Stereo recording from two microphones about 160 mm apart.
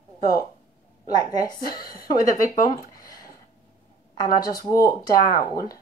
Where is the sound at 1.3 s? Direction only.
25° left (ahead or behind).